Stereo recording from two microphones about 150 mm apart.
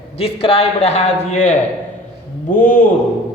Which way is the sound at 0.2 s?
40° left (ahead or behind).